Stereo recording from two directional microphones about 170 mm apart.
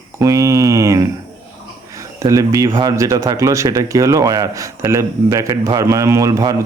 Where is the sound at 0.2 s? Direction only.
20° right (ahead or behind).